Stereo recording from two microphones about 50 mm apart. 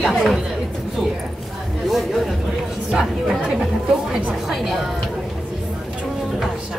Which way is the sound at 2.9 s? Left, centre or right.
Centre.